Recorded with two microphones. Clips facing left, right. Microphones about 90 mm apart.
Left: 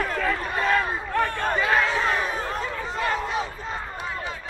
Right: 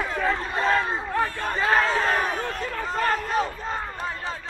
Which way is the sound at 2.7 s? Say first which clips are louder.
Right 2 dB; 40° right (ahead or behind).